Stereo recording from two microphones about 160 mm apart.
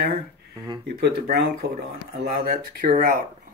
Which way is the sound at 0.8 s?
75° right (ahead or behind).